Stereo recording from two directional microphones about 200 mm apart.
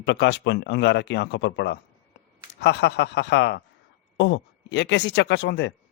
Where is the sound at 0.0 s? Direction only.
60° left (ahead or behind).